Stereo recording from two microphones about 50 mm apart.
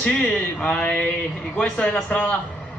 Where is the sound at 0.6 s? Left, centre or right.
Left.